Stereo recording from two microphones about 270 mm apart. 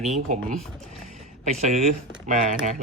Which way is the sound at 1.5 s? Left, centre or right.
Right.